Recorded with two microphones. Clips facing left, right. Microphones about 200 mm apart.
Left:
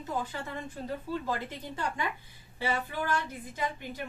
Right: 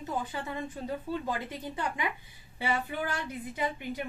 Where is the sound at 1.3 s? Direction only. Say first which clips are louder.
Even; 15° right (ahead or behind).